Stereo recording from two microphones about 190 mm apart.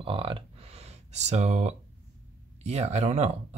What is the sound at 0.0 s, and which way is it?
Speech, 30° right (ahead or behind).